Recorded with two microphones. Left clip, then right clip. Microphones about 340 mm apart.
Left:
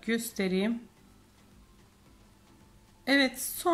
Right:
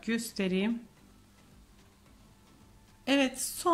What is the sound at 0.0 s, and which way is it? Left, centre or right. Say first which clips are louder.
Speech: left 2 dB; centre.